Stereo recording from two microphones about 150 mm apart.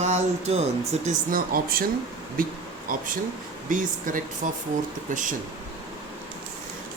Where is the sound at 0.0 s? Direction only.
45° right (ahead or behind).